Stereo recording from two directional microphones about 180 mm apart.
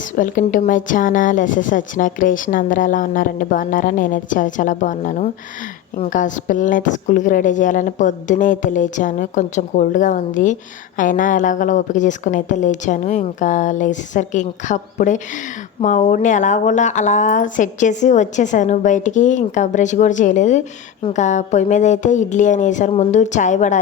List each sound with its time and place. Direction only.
0.2 s a woman's voice: 45° left (ahead or behind)